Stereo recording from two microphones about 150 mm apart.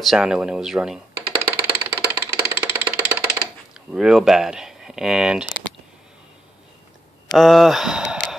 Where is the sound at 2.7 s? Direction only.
25° right (ahead or behind).